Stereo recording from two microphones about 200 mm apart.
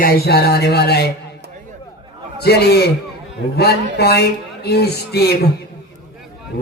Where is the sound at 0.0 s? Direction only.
55° left (ahead or behind).